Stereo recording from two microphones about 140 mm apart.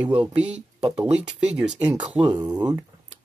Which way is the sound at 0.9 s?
50° right (ahead or behind).